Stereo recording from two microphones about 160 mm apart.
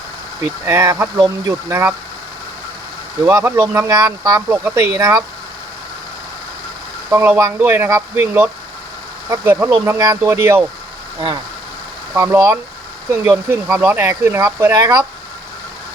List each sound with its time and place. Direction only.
0.4 s speech: 15° right (ahead or behind)
3.2 s speech: 15° right (ahead or behind)
4.4 s speech: 10° right (ahead or behind)
7.1 s speech: 15° right (ahead or behind)
12.1 s speech: 15° right (ahead or behind)